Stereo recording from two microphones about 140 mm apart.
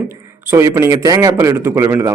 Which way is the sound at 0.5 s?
20° right (ahead or behind).